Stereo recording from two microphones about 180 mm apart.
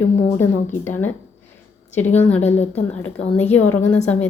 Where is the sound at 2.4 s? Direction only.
35° left (ahead or behind).